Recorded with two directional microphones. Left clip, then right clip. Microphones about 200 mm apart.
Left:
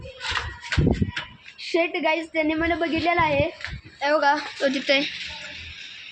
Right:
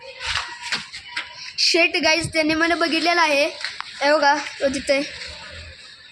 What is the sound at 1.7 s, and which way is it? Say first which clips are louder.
A woman's voice: right 4 dB; 5° right (ahead or behind).